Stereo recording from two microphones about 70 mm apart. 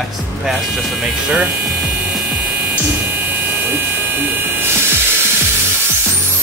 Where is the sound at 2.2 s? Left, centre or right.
Right.